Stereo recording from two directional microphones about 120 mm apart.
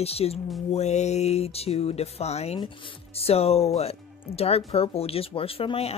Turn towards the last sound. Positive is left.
turn(degrees=55)  # may be behind; listen again after turning